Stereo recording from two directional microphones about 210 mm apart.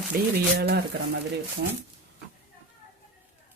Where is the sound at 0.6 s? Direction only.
50° right (ahead or behind).